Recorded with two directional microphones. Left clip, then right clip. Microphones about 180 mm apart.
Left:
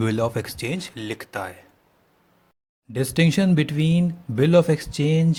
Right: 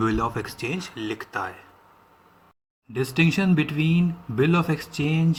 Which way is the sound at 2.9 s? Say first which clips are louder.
Left 1 dB; 45° left (ahead or behind).